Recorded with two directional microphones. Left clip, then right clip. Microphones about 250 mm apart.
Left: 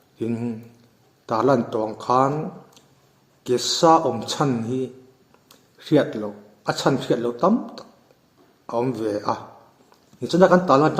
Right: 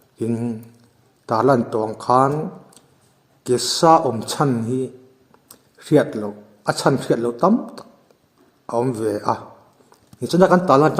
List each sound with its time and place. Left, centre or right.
0.2 s a man's voice: right